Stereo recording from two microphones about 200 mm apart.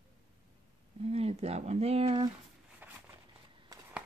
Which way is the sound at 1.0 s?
30° right (ahead or behind).